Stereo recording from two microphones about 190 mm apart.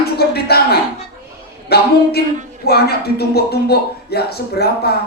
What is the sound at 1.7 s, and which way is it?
Speech, 55° left (ahead or behind).